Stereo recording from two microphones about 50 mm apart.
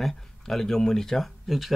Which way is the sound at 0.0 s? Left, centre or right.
Centre.